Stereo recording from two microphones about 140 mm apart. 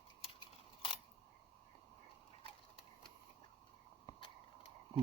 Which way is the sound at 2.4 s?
40° left (ahead or behind).